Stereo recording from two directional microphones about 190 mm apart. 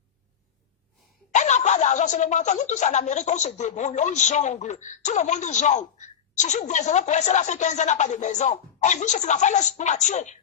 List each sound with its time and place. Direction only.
1.3 s speech: 40° left (ahead or behind)